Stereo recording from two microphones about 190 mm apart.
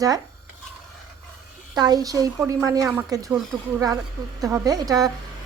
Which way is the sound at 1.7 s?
20° right (ahead or behind).